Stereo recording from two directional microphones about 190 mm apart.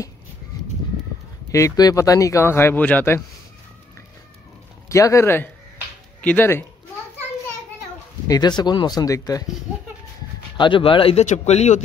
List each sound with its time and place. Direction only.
1.5 s speech: 20° left (ahead or behind)
4.8 s speech: 15° left (ahead or behind)
8.3 s speech: 20° left (ahead or behind)
10.6 s speech: 25° left (ahead or behind)